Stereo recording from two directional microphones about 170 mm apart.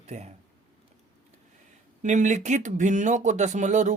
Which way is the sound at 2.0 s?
45° right (ahead or behind).